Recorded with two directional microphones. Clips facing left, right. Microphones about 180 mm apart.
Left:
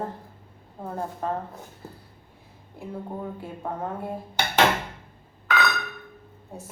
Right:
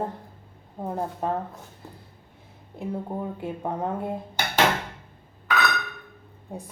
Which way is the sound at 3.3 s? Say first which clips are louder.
Right 3 dB; 20° right (ahead or behind).